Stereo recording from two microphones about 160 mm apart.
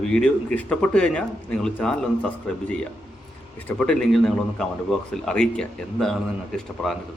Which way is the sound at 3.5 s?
10° left (ahead or behind).